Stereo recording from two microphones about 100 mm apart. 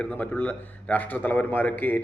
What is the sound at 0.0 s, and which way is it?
A man's voice, 15° left (ahead or behind).